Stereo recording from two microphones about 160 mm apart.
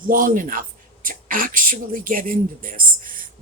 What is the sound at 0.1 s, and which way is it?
Speech, 60° right (ahead or behind).